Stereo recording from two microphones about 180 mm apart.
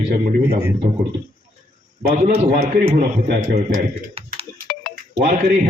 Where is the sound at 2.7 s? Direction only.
55° right (ahead or behind).